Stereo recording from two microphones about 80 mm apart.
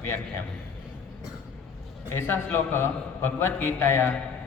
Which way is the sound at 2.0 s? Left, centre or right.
Left.